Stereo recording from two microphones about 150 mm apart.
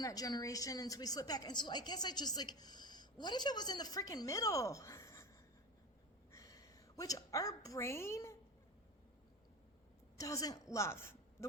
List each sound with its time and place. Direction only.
0.0 s a woman's voice: 25° left (ahead or behind)
6.3 s a woman's voice: 20° left (ahead or behind)
10.2 s a woman's voice: 20° left (ahead or behind)